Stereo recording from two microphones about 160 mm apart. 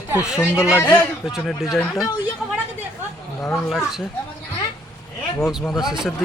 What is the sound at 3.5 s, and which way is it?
Speech, centre (ahead or behind).